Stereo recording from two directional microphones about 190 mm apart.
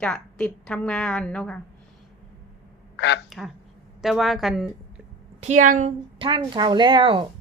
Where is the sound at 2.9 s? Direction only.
70° left (ahead or behind).